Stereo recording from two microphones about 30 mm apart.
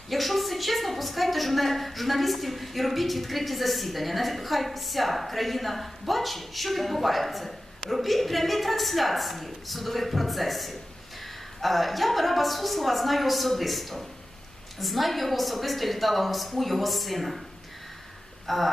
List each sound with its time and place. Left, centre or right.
0.1 s a woman's voice: centre
18.4 s a woman's voice: centre